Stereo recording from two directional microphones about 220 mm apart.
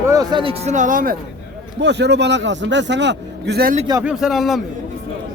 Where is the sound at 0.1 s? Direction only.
20° right (ahead or behind); by 1.1 s 35° right (ahead or behind).